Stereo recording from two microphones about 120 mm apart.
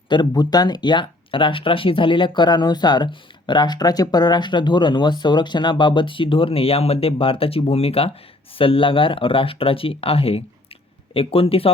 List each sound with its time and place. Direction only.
0.1 s speech: 35° left (ahead or behind); by 11.7 s 55° left (ahead or behind)